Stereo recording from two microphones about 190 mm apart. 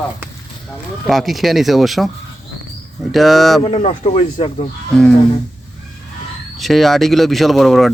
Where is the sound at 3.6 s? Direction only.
30° left (ahead or behind).